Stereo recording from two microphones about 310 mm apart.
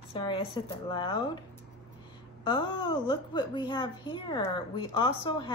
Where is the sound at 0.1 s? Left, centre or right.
Centre.